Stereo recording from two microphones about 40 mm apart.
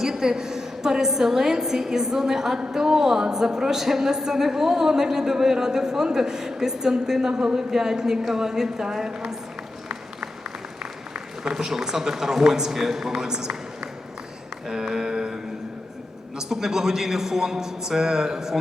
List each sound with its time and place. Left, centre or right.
0.0 s a woman's voice: centre
9.9 s a sound: right
11.5 s a woman's voice: centre
16.4 s a woman's voice: centre